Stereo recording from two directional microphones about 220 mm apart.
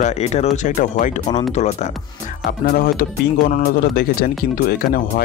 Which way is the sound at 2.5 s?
40° left (ahead or behind).